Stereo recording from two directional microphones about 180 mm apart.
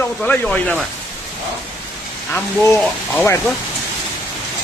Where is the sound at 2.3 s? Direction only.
15° left (ahead or behind).